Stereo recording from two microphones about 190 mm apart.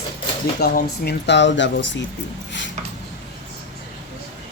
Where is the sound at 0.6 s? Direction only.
55° left (ahead or behind); by 2.0 s 70° left (ahead or behind).